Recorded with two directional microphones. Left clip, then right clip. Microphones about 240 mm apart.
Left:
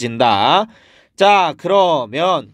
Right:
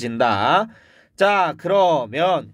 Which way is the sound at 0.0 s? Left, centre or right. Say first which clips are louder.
Left 5 dB; left.